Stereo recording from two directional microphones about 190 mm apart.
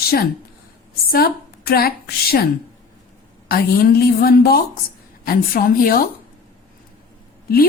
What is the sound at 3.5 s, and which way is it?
A woman's voice, 50° left (ahead or behind).